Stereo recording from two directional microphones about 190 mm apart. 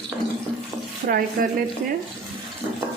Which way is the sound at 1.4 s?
50° right (ahead or behind).